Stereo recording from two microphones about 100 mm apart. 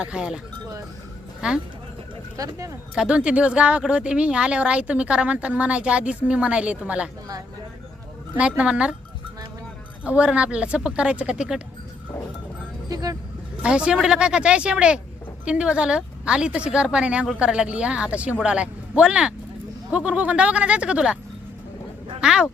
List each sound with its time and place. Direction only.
0.0 s speech: 10° right (ahead or behind)
1.4 s speech: 10° right (ahead or behind)
2.3 s speech: 35° right (ahead or behind)
2.9 s speech: 10° right (ahead or behind)
8.4 s speech: 10° right (ahead or behind)
10.0 s speech: 15° right (ahead or behind)
12.9 s speech: 40° right (ahead or behind)
13.6 s speech: 10° right (ahead or behind)
22.2 s speech: 10° right (ahead or behind)